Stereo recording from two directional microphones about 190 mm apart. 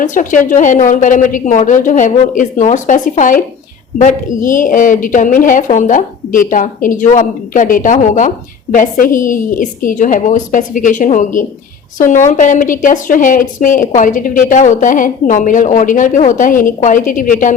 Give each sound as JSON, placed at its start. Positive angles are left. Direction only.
{"t": 0.0, "sound": "a woman's voice", "side_deg": 40}